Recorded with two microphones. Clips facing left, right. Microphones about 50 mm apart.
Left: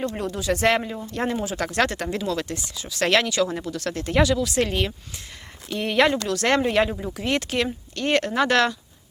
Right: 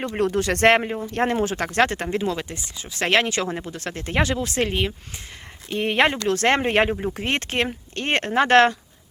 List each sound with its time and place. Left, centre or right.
0.1 s speech: right